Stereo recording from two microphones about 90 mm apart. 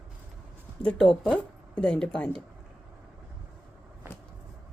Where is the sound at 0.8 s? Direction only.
10° left (ahead or behind).